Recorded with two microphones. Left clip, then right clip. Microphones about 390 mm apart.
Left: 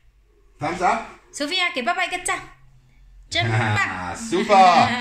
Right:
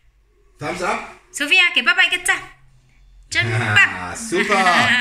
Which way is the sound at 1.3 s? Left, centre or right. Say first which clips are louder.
Right 8 dB; centre.